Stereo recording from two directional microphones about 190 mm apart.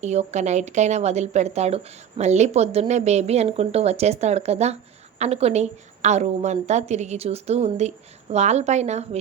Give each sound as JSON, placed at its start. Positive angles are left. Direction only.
{"t": 0.0, "sound": "speech", "side_deg": -35}